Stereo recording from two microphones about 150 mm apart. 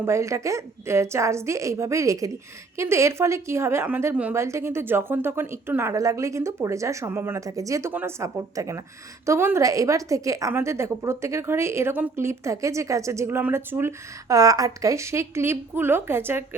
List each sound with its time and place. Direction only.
0.0 s a woman's voice: 20° right (ahead or behind)